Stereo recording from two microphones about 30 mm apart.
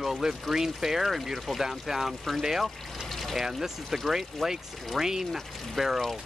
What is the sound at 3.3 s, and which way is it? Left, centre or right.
Speech, centre.